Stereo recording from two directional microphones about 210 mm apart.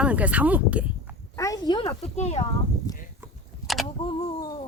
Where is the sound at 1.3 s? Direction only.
15° left (ahead or behind).